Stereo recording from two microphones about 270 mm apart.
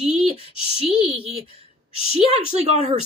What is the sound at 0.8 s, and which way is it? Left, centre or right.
Speech, right.